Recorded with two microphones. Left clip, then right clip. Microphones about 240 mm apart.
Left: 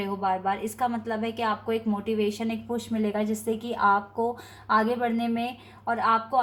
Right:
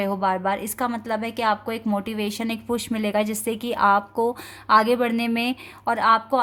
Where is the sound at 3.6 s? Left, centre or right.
Right.